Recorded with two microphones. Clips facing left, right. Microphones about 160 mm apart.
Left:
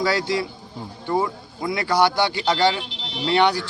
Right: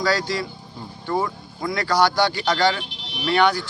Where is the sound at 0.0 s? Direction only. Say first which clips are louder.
Left 1 dB; 20° left (ahead or behind).